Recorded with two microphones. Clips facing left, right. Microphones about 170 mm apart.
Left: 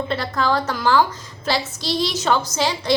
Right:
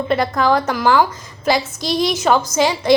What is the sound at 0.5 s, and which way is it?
Speech, 65° right (ahead or behind).